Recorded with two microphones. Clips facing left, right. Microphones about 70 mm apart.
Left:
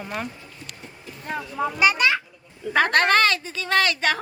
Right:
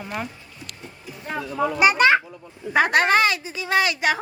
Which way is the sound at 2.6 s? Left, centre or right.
Centre.